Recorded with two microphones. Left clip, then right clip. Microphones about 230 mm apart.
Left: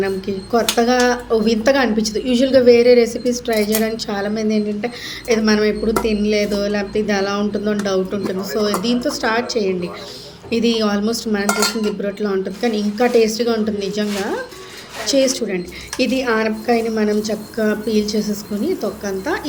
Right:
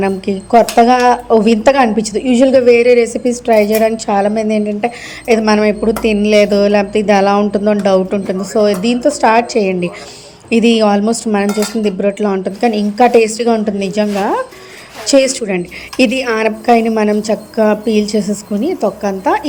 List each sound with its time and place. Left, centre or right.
0.0 s speech: right